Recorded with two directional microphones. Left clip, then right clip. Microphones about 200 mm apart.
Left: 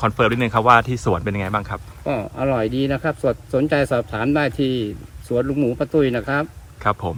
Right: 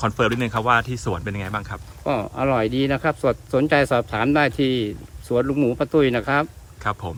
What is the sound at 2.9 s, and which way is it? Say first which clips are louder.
Speech: even; 15° right (ahead or behind).